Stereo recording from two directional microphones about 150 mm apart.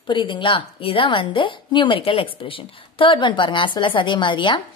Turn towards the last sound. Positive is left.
turn(degrees=30)  # may be behind; listen again after turning